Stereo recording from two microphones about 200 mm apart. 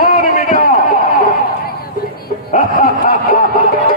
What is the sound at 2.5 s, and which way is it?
Snicker, 45° left (ahead or behind).